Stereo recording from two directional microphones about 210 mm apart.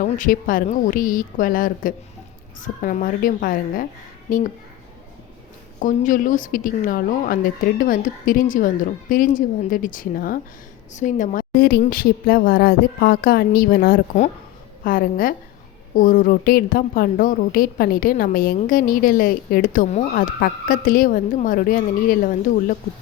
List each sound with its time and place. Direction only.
0.0 s a woman's voice: 40° left (ahead or behind)
5.8 s a woman's voice: 40° left (ahead or behind)